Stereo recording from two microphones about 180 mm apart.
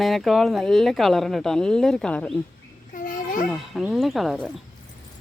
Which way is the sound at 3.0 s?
50° left (ahead or behind).